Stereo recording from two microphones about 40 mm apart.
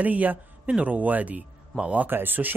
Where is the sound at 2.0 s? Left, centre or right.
Right.